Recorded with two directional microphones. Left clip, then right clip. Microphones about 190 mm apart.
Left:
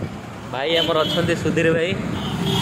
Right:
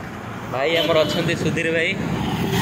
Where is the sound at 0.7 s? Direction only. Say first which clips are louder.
Right 1 dB; 15° left (ahead or behind).